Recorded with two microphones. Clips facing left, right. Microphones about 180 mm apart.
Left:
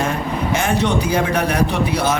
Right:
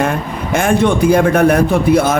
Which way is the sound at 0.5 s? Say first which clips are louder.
Right 6 dB; 50° right (ahead or behind).